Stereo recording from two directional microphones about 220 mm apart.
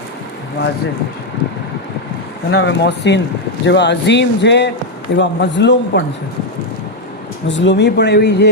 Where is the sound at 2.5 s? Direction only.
50° left (ahead or behind).